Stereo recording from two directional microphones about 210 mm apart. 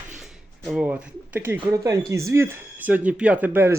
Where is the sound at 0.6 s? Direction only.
5° right (ahead or behind).